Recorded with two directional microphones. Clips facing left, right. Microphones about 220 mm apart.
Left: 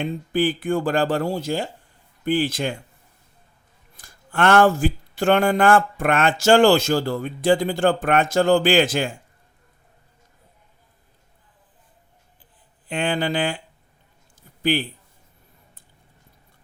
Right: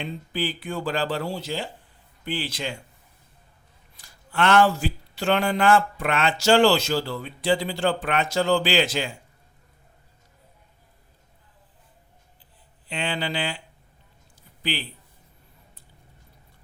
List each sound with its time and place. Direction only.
0.0 s speech: 50° left (ahead or behind)
3.9 s speech: 50° left (ahead or behind)
12.9 s speech: 50° left (ahead or behind)
14.6 s a man's voice: 50° left (ahead or behind)